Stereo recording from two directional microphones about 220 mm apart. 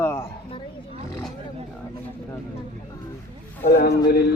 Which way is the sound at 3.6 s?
45° left (ahead or behind).